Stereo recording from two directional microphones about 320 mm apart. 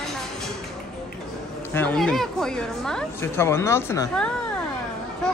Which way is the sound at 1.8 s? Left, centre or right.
Centre.